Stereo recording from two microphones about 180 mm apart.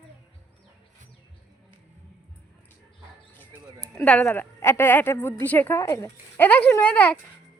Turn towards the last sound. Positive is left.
turn(degrees=10)  # may be behind; listen again after turning